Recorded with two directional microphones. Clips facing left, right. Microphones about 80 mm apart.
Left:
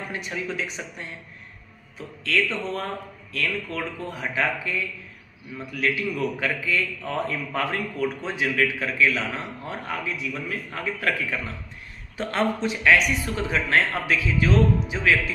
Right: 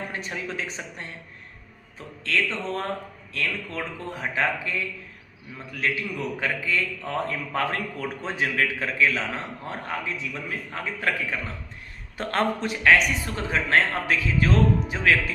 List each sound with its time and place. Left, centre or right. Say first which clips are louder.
0.1 s a man's voice: left 2 dB; right
2.2 s a man's voice: left 1 dB; right
6.0 s a man's voice: left 3 dB; right
12.1 s a man's voice: even; right